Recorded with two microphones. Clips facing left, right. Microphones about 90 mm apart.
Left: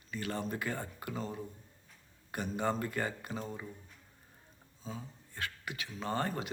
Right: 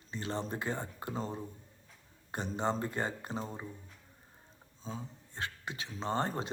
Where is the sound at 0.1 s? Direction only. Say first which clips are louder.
Even; 25° right (ahead or behind).